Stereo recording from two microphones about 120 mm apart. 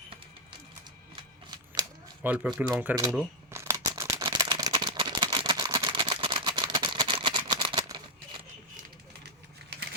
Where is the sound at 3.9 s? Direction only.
30° right (ahead or behind).